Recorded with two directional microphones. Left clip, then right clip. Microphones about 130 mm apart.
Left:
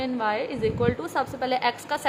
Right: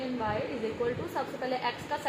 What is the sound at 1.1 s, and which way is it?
Speech, 90° left.